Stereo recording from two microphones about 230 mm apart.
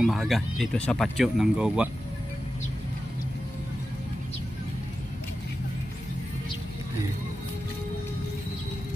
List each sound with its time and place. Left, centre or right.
0.0 s speech: centre